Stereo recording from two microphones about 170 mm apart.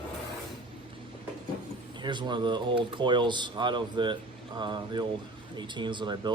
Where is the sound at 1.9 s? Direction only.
25° right (ahead or behind).